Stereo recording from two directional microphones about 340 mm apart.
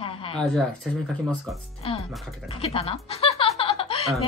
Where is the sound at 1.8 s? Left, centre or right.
Centre.